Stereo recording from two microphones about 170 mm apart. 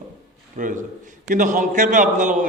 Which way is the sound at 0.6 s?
45° right (ahead or behind).